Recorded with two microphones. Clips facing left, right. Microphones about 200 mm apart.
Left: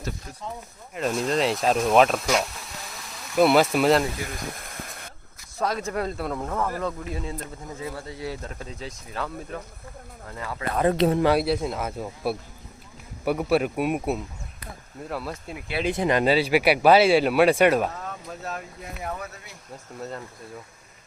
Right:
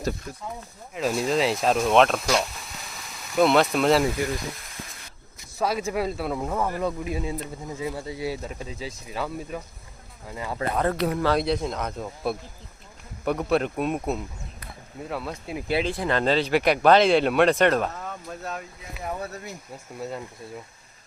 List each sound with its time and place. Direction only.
0.9 s speech: 5° right (ahead or behind)
4.5 s a sound: 55° left (ahead or behind)
5.5 s speech: 10° right (ahead or behind)
10.8 s speech: 25° left (ahead or behind)
11.3 s speech: 5° left (ahead or behind)
15.8 s speech: 15° left (ahead or behind); by 19.1 s centre (ahead or behind)
19.2 s speech: 40° right (ahead or behind)
20.0 s speech: 10° right (ahead or behind)